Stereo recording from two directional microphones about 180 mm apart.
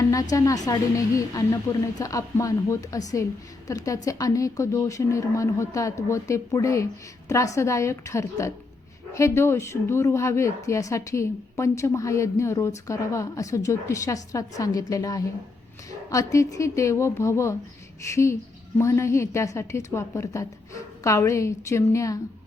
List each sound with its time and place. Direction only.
0.0 s a woman's voice: 20° left (ahead or behind)